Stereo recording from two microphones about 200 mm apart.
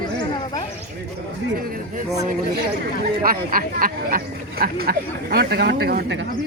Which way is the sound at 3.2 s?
45° right (ahead or behind).